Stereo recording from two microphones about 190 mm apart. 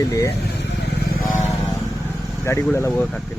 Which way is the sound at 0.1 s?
15° left (ahead or behind).